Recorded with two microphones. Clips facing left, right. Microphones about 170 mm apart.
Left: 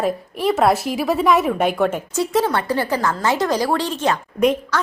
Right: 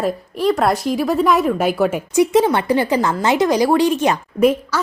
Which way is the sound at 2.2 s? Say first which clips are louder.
Right 5 dB; 15° right (ahead or behind).